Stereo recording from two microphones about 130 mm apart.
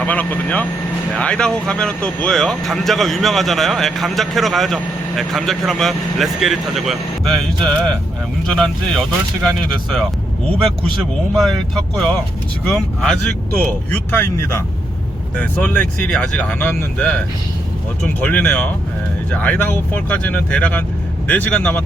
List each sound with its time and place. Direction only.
0.0 s speech: 10° left (ahead or behind)
8.4 s speech: 5° left (ahead or behind)
11.3 s speech: centre (ahead or behind)
13.9 s speech: 15° left (ahead or behind)
15.4 s speech: 10° left (ahead or behind)
18.3 s speech: 10° left (ahead or behind)